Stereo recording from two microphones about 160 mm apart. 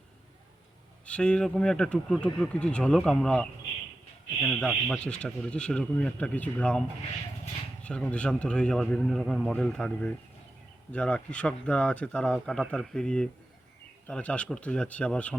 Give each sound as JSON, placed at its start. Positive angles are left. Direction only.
{"t": 1.0, "sound": "speech", "side_deg": 5}